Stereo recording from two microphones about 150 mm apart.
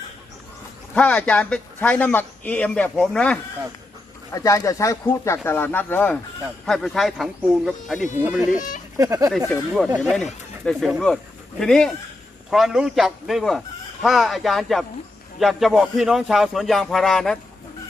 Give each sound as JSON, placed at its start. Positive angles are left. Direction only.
{"t": 0.9, "sound": "a man's voice", "side_deg": 10}
{"t": 4.3, "sound": "a man's voice", "side_deg": 20}
{"t": 9.0, "sound": "speech", "side_deg": -20}
{"t": 10.0, "sound": "speech", "side_deg": 0}